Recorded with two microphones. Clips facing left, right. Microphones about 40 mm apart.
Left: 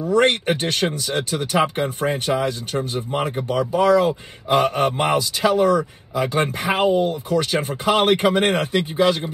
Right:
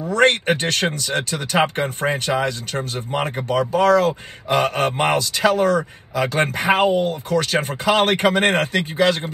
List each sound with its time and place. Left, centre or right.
0.1 s speech: right
3.2 s speech: right